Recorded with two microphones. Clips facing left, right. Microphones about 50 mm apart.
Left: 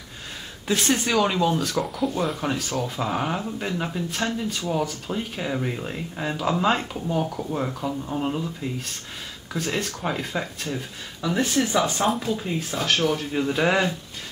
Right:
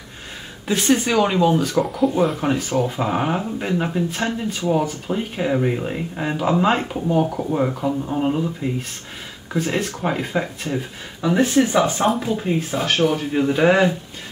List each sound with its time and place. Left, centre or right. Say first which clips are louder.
0.7 s speech: right 4 dB; centre